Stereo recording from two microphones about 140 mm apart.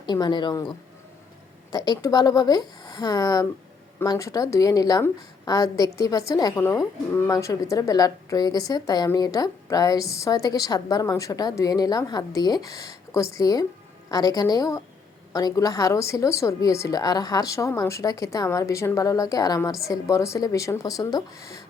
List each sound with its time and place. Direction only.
0.0 s speech: 30° left (ahead or behind)
1.7 s a woman's voice: 30° left (ahead or behind)